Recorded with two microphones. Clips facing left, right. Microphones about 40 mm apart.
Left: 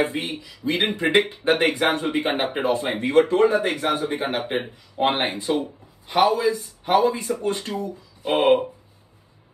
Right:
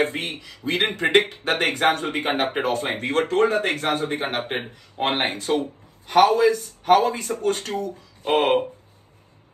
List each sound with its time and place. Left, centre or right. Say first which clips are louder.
0.1 s speech: left 1 dB; right
4.5 s speech: left 2 dB; centre
5.0 s speech: left 1 dB; right
5.4 s speech: right 1 dB; right